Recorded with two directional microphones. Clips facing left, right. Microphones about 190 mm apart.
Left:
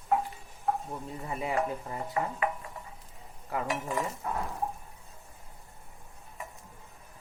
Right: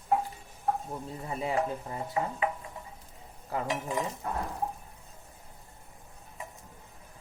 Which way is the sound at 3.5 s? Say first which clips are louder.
Even; 25° right (ahead or behind).